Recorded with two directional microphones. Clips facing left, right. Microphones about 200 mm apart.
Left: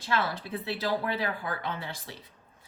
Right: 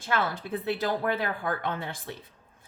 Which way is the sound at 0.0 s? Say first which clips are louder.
Right 1 dB; 50° right (ahead or behind).